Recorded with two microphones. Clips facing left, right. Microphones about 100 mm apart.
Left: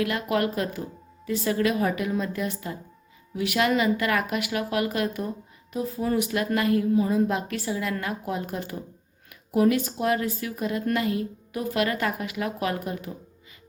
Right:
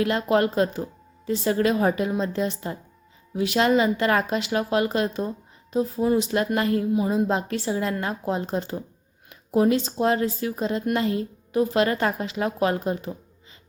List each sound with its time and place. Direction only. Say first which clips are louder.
0.0 s speech: right 4 dB; 30° right (ahead or behind)
6.9 s speech: even; 20° right (ahead or behind)